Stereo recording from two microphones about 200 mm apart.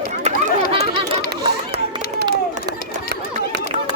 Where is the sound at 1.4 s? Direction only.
50° right (ahead or behind).